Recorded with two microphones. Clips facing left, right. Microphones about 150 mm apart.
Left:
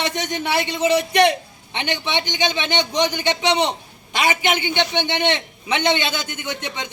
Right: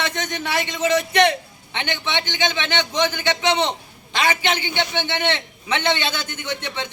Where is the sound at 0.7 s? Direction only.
10° left (ahead or behind).